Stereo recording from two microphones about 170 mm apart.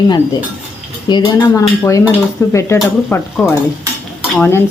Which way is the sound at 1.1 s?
20° left (ahead or behind).